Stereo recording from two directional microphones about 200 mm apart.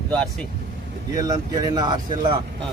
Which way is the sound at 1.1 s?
20° right (ahead or behind).